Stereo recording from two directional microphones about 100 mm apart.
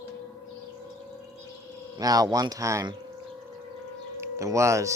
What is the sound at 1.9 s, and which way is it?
Speech, 40° right (ahead or behind).